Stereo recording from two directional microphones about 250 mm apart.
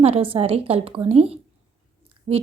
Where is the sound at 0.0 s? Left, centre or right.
Right.